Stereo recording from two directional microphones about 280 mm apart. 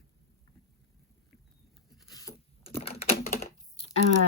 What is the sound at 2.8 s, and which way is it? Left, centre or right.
Typing, left.